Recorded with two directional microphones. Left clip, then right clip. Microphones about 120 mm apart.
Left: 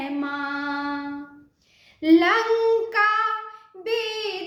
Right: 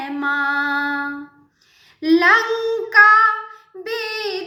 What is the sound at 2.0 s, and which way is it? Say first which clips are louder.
Child singing: right 4 dB; 45° left (ahead or behind).